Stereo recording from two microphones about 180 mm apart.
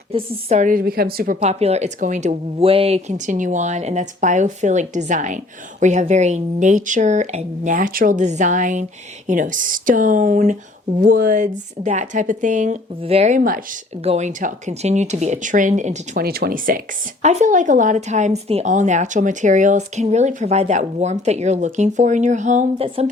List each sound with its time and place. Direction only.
0.1 s speech: 35° right (ahead or behind); by 1.4 s 55° right (ahead or behind)
1.4 s speech: 35° right (ahead or behind)
16.2 s speech: 60° right (ahead or behind); by 23.0 s 40° right (ahead or behind)